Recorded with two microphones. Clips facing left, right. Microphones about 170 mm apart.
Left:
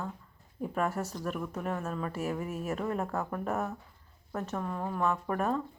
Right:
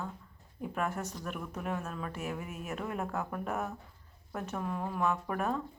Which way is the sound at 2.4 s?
45° left (ahead or behind).